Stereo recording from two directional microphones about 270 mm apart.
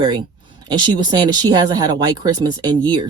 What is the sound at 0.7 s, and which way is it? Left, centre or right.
Speech, centre.